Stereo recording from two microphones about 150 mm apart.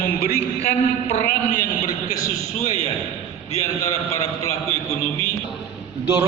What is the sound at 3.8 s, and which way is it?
Speech, 20° left (ahead or behind).